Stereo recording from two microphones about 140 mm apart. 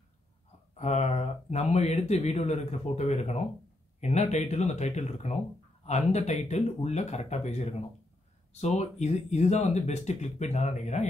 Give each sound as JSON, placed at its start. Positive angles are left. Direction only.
{"t": 0.7, "sound": "speech", "side_deg": 50}